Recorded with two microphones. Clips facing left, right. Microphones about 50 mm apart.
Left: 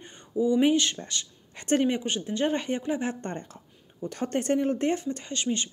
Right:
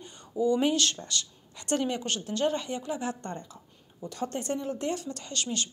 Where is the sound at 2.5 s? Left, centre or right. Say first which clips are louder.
Left 4 dB; left.